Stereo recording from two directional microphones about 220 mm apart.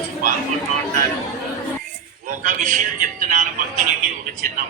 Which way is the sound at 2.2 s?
35° right (ahead or behind).